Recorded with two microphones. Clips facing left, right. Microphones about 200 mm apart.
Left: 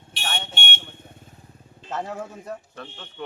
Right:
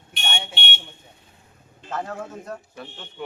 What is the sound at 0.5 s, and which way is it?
Vehicle, 50° left (ahead or behind).